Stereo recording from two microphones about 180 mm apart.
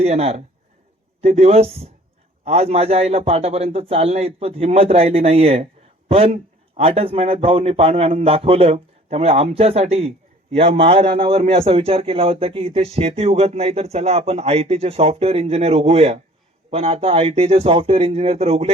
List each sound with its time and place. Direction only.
0.0 s a man's voice: 35° right (ahead or behind)